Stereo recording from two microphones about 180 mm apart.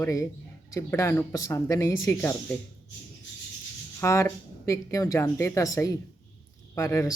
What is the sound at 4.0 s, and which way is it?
Speech, 15° left (ahead or behind).